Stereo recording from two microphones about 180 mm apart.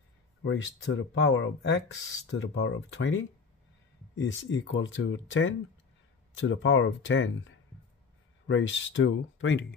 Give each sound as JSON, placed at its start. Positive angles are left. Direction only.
{"t": 0.4, "sound": "speech", "side_deg": 90}